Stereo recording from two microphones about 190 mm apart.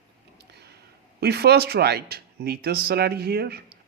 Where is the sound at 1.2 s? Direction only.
60° right (ahead or behind).